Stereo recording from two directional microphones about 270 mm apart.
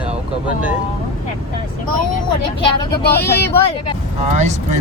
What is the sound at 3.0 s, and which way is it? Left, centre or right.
Speech, left.